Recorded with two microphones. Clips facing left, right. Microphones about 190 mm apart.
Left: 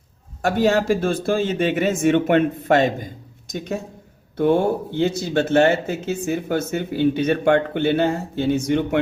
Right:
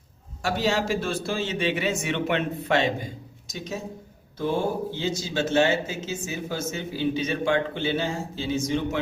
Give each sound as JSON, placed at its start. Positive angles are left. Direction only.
{"t": 0.4, "sound": "speech", "side_deg": 50}
{"t": 3.5, "sound": "speech", "side_deg": 60}